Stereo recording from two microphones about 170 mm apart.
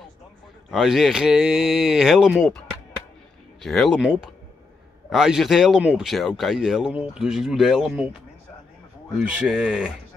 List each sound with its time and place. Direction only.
0.7 s speech: centre (ahead or behind)
3.6 s speech: centre (ahead or behind)